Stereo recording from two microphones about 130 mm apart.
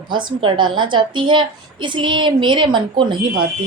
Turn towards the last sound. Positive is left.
turn(degrees=-35)  # may be behind; listen again after turning